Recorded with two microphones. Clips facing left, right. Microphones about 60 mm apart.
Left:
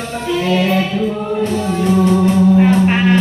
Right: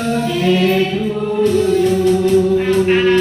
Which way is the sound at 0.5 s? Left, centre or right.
Centre.